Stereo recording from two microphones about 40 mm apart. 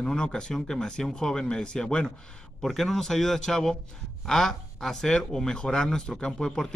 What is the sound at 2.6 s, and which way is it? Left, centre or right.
Speech, centre.